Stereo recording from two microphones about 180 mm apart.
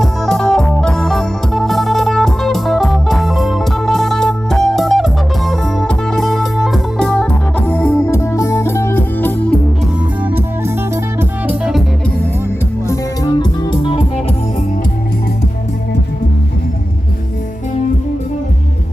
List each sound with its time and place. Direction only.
0.0 s music: centre (ahead or behind)
10.2 s music: 10° right (ahead or behind)
12.9 s music: 20° left (ahead or behind)